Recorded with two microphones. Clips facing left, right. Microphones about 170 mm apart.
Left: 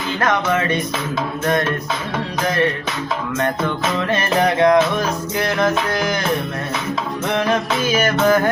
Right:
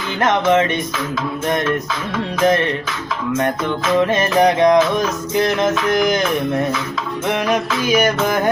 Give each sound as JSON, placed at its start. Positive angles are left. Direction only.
{"t": 0.2, "sound": "music", "side_deg": -20}
{"t": 4.0, "sound": "music", "side_deg": -20}
{"t": 7.3, "sound": "music", "side_deg": -10}